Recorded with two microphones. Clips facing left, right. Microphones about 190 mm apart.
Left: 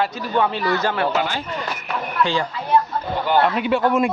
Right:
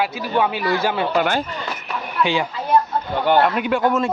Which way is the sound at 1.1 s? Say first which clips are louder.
Right 4 dB; 50° right (ahead or behind).